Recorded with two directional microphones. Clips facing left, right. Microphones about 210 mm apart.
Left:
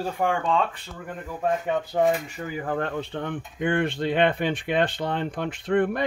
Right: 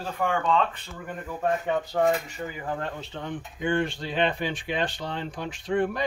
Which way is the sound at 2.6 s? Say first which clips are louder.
Left 7 dB; 55° left (ahead or behind).